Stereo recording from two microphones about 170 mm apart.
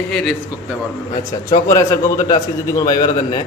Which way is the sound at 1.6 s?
20° left (ahead or behind).